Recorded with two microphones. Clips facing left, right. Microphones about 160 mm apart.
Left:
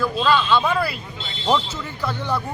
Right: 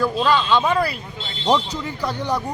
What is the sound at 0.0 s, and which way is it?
A man's voice, 15° right (ahead or behind).